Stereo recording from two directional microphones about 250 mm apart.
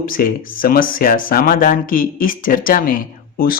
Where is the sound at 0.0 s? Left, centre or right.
Left.